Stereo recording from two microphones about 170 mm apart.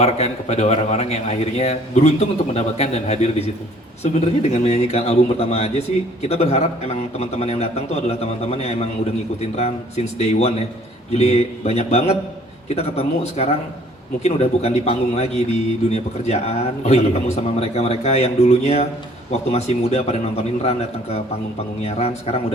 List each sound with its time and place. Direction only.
0.0 s a man's voice: 40° left (ahead or behind)